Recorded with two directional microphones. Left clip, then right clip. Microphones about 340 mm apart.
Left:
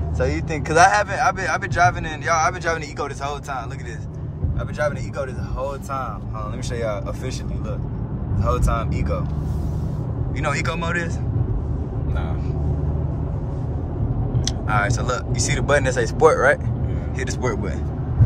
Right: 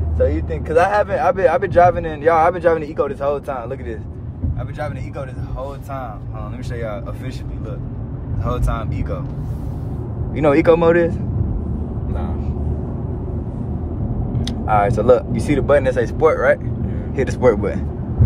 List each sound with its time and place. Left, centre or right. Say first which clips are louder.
0.2 s speech: right 5 dB; centre
8.5 s speech: left 1 dB; centre
10.3 s speech: right 12 dB; centre
14.4 s speech: right 6 dB; centre
17.2 s speech: right 10 dB; centre